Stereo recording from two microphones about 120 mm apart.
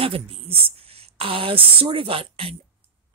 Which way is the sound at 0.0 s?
50° right (ahead or behind).